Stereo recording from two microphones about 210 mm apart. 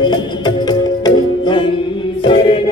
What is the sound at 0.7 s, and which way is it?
Music, 20° left (ahead or behind).